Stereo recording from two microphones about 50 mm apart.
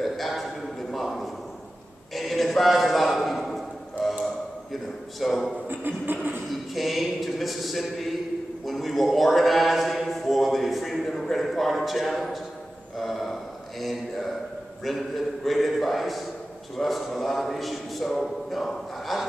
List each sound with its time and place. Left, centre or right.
0.0 s a sound: centre
4.0 s tick-tock: centre
5.2 s a man's voice: centre
5.7 s music: right
6.5 s a man's voice: centre
8.6 s a sound: centre
12.9 s mantra: centre
14.8 s a man's voice: centre